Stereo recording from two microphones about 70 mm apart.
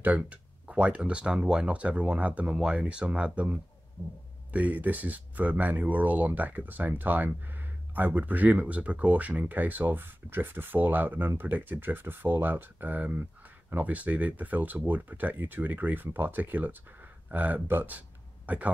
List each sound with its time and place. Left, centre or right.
0.0 s speech: right
4.0 s speech: left
4.5 s speech: right